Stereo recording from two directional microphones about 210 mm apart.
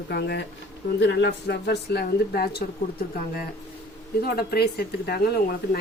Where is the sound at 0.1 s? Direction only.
50° left (ahead or behind).